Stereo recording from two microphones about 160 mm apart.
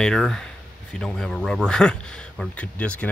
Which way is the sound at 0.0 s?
5° left (ahead or behind).